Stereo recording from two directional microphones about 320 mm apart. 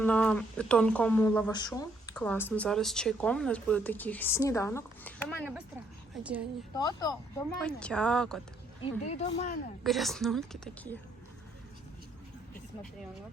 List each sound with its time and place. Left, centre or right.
0.0 s speech: centre
6.7 s speech: centre
8.8 s speech: centre
9.8 s speech: centre